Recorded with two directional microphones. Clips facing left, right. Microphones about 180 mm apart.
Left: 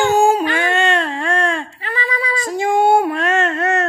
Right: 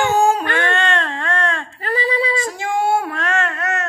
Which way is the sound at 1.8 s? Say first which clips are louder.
Right 4 dB; 35° right (ahead or behind).